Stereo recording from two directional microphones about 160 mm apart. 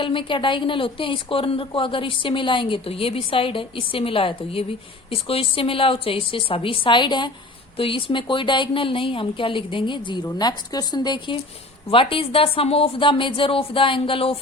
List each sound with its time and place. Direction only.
0.0 s a woman's voice: 30° left (ahead or behind)